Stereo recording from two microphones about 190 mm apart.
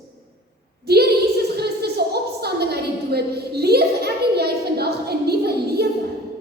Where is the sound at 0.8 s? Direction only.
55° right (ahead or behind).